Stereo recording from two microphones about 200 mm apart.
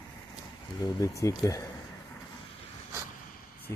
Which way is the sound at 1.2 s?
15° left (ahead or behind).